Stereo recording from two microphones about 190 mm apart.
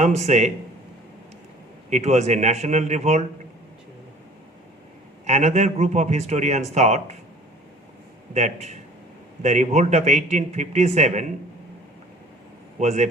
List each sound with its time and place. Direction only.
0.0 s a man's voice: 35° right (ahead or behind)
1.9 s a man's voice: 35° right (ahead or behind)
5.2 s a man's voice: 35° right (ahead or behind)
8.3 s a man's voice: 40° right (ahead or behind)
12.8 s a man's voice: 35° right (ahead or behind)